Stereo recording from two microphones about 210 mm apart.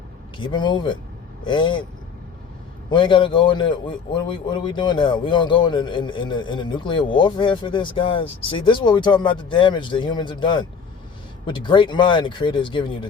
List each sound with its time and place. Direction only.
0.3 s a man's voice: 20° left (ahead or behind)
2.9 s a man's voice: 25° left (ahead or behind)